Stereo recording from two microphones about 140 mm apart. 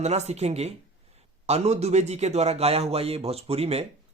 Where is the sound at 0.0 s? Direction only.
50° right (ahead or behind).